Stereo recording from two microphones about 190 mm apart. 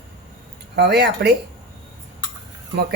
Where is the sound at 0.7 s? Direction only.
60° right (ahead or behind).